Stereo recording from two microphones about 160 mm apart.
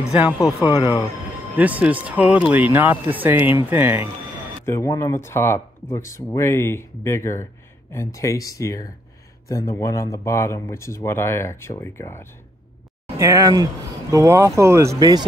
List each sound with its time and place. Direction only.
0.4 s speech: 25° left (ahead or behind)
1.6 s speech: 10° right (ahead or behind)
4.6 s speech: 20° left (ahead or behind)
13.2 s speech: 20° right (ahead or behind)